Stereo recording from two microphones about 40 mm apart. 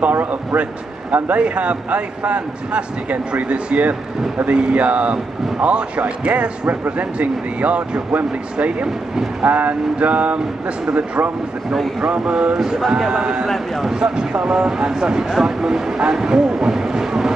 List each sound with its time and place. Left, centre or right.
0.0 s speech: right
1.4 s speech: right
6.7 s speech: right
7.2 s speech: right
8.8 s speech: centre
9.4 s speech: right
12.0 s speech: right
12.5 s speech: centre
13.1 s speech: right